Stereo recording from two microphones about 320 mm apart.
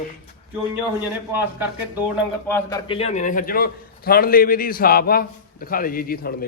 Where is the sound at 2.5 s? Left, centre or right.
Centre; by 6.5 s left.